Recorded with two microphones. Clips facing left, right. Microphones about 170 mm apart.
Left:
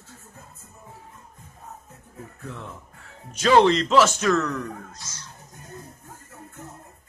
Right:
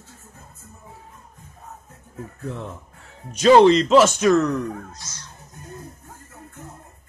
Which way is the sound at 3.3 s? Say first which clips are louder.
Right 5 dB; 20° right (ahead or behind).